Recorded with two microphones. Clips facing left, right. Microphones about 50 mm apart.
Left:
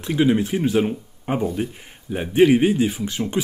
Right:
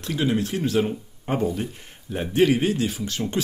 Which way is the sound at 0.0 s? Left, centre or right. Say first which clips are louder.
Left 5 dB; centre.